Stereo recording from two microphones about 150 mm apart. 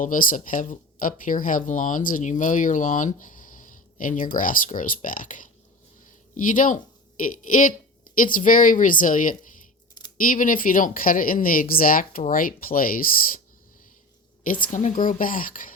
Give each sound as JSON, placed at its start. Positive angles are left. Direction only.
{"t": 0.0, "sound": "speech", "side_deg": 65}
{"t": 14.4, "sound": "speech", "side_deg": 65}